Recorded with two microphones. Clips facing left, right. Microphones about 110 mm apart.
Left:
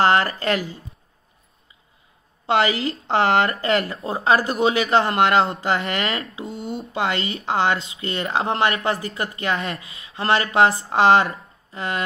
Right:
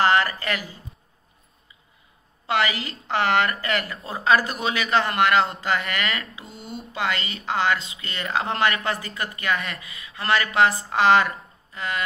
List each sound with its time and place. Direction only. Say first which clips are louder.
0.0 s speech: left 2 dB; 35° left (ahead or behind)
2.4 s speech: left 4 dB; 30° left (ahead or behind)